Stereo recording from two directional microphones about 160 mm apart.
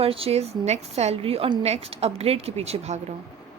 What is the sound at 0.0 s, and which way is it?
A woman's voice, 35° right (ahead or behind).